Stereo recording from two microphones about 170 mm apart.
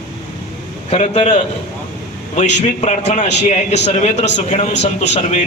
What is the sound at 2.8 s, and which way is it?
A man's voice, 40° left (ahead or behind).